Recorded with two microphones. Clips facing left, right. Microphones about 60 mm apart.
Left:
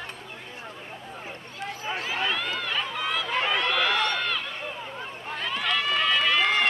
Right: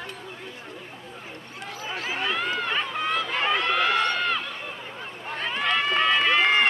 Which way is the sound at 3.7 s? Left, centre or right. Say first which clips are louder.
Right 2 dB; right.